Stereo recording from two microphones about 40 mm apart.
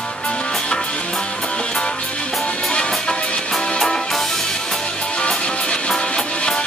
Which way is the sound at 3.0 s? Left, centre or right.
Left.